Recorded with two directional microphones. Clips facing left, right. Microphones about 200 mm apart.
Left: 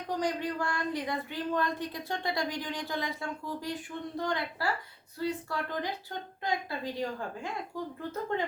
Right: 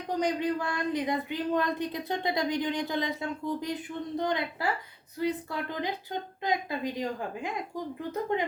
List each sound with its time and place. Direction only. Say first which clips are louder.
0.2 s a woman's voice: right 5 dB; 20° right (ahead or behind)